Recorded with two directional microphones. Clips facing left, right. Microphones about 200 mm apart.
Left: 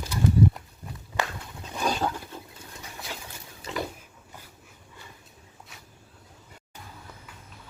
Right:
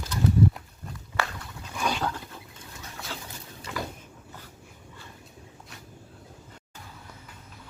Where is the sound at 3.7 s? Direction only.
25° left (ahead or behind).